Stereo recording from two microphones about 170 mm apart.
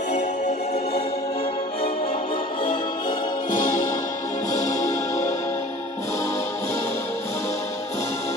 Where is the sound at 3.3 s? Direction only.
50° left (ahead or behind).